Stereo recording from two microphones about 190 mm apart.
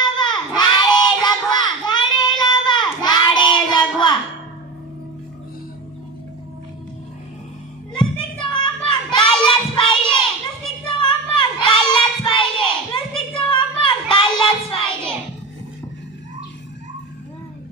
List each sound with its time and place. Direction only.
0.0 s child singing: 25° left (ahead or behind)
7.9 s a sound: 25° left (ahead or behind)
10.9 s child singing: 25° left (ahead or behind)